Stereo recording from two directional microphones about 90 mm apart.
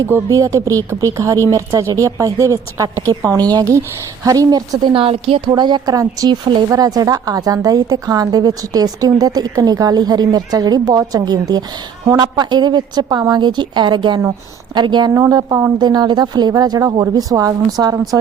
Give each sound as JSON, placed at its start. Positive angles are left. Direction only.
{"t": 0.3, "sound": "speech", "side_deg": -35}
{"t": 4.8, "sound": "a woman's voice", "side_deg": -70}
{"t": 5.5, "sound": "a woman's voice", "side_deg": -55}
{"t": 15.3, "sound": "a woman's voice", "side_deg": -45}